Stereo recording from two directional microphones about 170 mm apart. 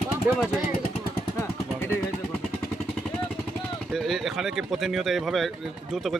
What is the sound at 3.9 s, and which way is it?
Speech, centre (ahead or behind).